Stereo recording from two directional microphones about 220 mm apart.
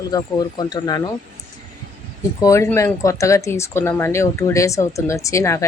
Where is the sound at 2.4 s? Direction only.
15° left (ahead or behind).